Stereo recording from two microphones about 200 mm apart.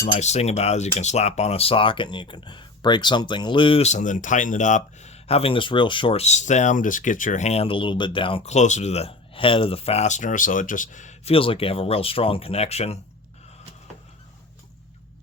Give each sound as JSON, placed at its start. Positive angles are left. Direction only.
{"t": 0.0, "sound": "speech", "side_deg": 35}